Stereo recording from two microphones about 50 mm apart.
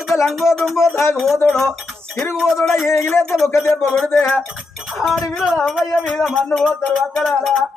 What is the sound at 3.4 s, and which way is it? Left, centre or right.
Speech, left.